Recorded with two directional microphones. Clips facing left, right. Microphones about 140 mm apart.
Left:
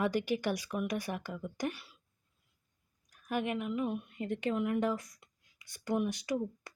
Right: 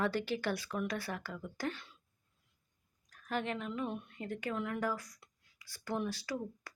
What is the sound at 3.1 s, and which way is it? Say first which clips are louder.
Speech: left 3 dB; 10° left (ahead or behind).